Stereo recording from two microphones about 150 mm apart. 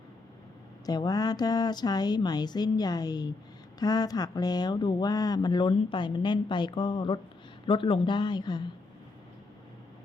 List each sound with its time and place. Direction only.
0.9 s speech: 25° left (ahead or behind)